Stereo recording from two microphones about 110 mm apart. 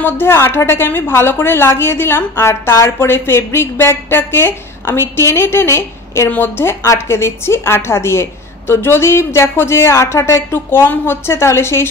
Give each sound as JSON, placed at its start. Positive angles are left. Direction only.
{"t": 0.0, "sound": "a woman's voice", "side_deg": 20}